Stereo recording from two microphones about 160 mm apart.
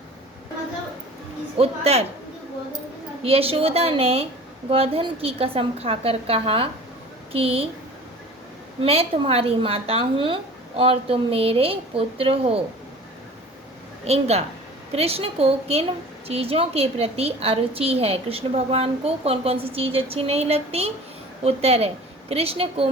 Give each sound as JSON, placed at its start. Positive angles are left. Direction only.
{"t": 1.5, "sound": "a woman's voice", "side_deg": -40}
{"t": 3.2, "sound": "a woman's voice", "side_deg": -35}
{"t": 8.8, "sound": "a woman's voice", "side_deg": -35}
{"t": 14.0, "sound": "a woman's voice", "side_deg": -40}